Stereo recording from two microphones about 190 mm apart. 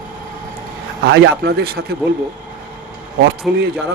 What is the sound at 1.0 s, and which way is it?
Speech, 60° right (ahead or behind).